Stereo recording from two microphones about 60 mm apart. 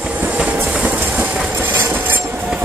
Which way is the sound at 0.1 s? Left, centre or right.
Right.